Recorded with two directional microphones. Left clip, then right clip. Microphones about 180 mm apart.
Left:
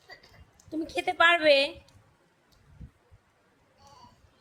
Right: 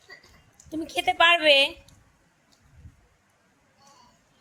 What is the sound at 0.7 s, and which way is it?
A woman's voice, 10° left (ahead or behind).